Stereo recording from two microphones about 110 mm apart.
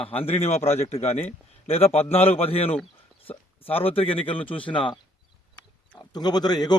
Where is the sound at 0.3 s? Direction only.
75° left (ahead or behind).